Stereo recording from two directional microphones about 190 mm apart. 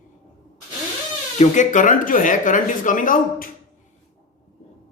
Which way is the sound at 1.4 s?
40° left (ahead or behind).